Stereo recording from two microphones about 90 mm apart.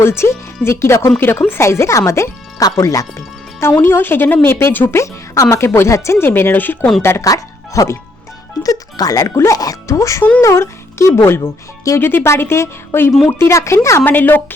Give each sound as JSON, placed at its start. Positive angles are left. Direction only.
{"t": 0.0, "sound": "speech", "side_deg": 30}
{"t": 2.7, "sound": "music", "side_deg": 35}
{"t": 3.7, "sound": "speech", "side_deg": 20}
{"t": 7.3, "sound": "speech", "side_deg": 40}